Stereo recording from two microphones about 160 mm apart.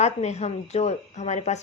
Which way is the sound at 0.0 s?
45° left (ahead or behind).